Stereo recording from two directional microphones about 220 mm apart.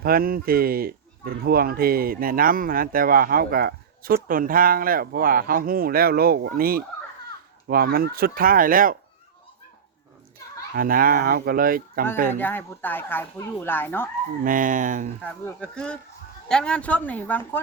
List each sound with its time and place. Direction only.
0.0 s speech: 40° right (ahead or behind)
10.8 s speech: 40° right (ahead or behind)
12.3 s speech: 10° left (ahead or behind)
14.4 s speech: 40° right (ahead or behind)
15.2 s speech: 5° left (ahead or behind)